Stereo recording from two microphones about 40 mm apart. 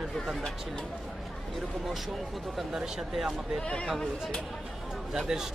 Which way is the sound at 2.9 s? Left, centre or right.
Centre.